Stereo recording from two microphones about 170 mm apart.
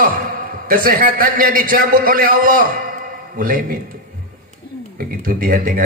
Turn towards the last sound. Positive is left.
turn(degrees=-55)  # may be behind; listen again after turning